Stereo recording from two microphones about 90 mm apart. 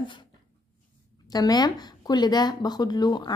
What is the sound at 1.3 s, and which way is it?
A woman's voice, 50° left (ahead or behind).